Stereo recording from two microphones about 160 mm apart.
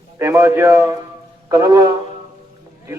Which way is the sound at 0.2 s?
15° right (ahead or behind).